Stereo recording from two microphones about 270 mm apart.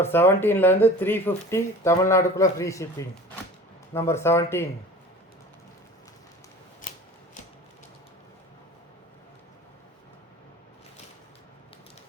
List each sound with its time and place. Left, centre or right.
0.0 s speech: centre
3.9 s speech: centre